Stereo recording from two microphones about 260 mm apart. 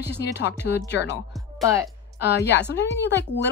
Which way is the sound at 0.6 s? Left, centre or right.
Left.